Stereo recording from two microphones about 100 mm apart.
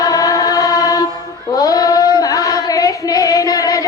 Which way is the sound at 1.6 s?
35° left (ahead or behind).